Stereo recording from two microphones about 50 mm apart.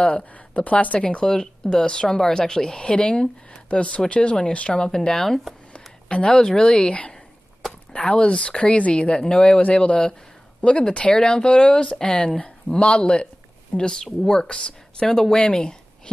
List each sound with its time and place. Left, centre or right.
0.2 s speech: left
1.0 s speech: centre
5.7 s speech: left